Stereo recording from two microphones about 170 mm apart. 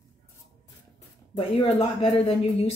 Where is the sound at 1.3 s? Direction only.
35° left (ahead or behind).